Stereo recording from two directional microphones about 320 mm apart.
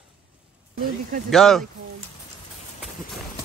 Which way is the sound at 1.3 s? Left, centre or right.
Centre.